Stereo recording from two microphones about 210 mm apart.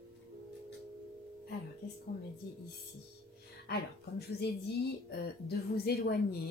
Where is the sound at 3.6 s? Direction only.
50° left (ahead or behind).